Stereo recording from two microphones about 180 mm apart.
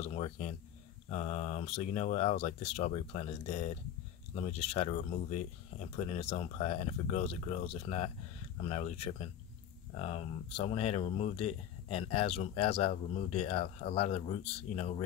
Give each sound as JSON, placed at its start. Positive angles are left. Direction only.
{"t": 0.0, "sound": "speech", "side_deg": 35}